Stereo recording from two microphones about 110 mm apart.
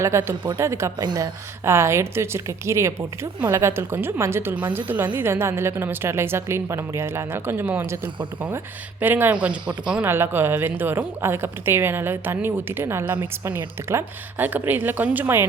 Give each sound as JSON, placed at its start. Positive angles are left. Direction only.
{"t": 0.0, "sound": "a woman's voice", "side_deg": -25}
{"t": 10.0, "sound": "a woman's voice", "side_deg": -20}